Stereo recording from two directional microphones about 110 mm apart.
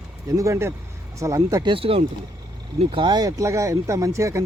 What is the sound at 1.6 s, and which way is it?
Speech, 55° right (ahead or behind).